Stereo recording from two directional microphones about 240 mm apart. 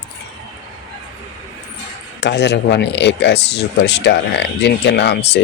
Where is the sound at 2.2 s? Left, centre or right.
Left.